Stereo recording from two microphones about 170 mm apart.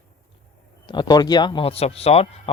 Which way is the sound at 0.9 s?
25° left (ahead or behind).